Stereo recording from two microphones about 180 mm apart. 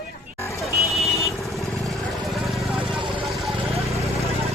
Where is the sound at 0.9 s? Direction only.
Centre (ahead or behind).